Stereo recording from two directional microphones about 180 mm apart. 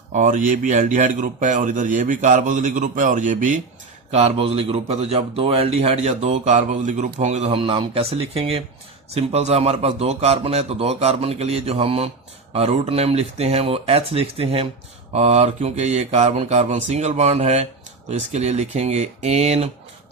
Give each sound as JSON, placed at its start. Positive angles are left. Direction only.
{"t": 0.1, "sound": "speech", "side_deg": -45}
{"t": 4.1, "sound": "speech", "side_deg": -35}